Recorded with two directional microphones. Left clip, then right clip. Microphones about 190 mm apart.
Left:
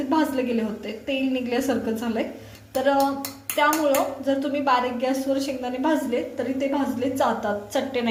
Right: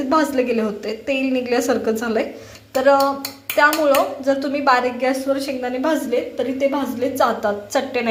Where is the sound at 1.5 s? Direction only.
30° right (ahead or behind).